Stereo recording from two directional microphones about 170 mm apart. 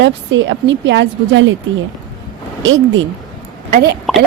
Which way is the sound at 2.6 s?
90° right.